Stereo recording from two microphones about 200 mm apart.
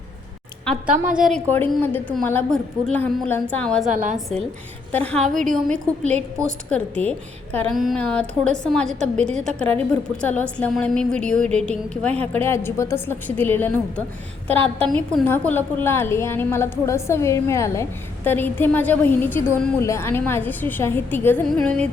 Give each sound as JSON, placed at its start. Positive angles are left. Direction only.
{"t": 0.6, "sound": "a woman's voice", "side_deg": 5}
{"t": 1.5, "sound": "a woman's voice", "side_deg": 10}
{"t": 4.9, "sound": "a woman's voice", "side_deg": 5}
{"t": 5.2, "sound": "a woman's voice", "side_deg": -40}
{"t": 5.6, "sound": "a woman's voice", "side_deg": 5}
{"t": 14.5, "sound": "a woman's voice", "side_deg": -30}
{"t": 14.8, "sound": "a woman's voice", "side_deg": 5}